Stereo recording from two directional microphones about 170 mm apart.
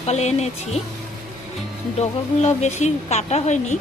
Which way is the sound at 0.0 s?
40° left (ahead or behind).